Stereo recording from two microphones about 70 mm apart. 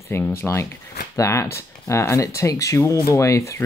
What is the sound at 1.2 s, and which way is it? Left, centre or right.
Speech, left.